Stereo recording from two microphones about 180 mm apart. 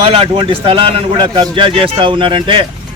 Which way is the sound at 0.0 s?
30° right (ahead or behind).